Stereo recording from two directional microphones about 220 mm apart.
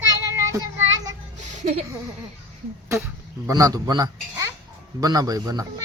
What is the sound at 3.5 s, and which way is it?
A man's voice, 15° right (ahead or behind).